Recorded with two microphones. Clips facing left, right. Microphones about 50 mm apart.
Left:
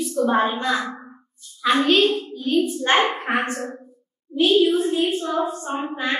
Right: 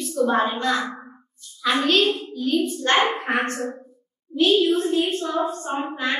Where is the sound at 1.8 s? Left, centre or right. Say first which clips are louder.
Left 2 dB; centre.